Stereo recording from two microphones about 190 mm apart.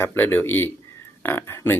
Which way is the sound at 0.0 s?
10° left (ahead or behind).